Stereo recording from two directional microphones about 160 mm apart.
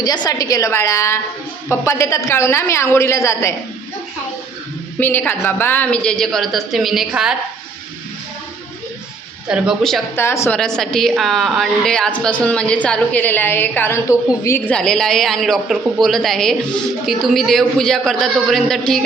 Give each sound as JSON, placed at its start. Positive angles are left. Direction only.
{"t": 0.0, "sound": "a woman's voice", "side_deg": 25}
{"t": 4.9, "sound": "a woman's voice", "side_deg": 15}
{"t": 9.5, "sound": "a woman's voice", "side_deg": 0}
{"t": 10.2, "sound": "speech", "side_deg": 15}
{"t": 10.6, "sound": "a woman's voice", "side_deg": 5}
{"t": 14.7, "sound": "a woman's voice", "side_deg": 5}